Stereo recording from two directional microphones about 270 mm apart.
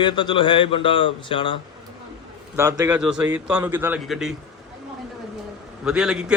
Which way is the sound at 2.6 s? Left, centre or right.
Centre.